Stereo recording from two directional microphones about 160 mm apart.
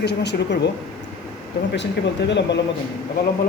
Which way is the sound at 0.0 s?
90° left.